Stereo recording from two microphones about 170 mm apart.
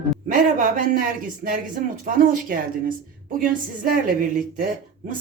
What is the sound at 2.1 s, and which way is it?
Speech, 55° right (ahead or behind).